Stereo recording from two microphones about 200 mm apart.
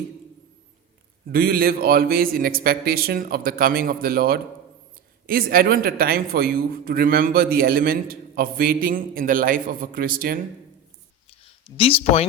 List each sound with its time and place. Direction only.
1.3 s speech: 50° right (ahead or behind)
11.8 s speech: 30° left (ahead or behind)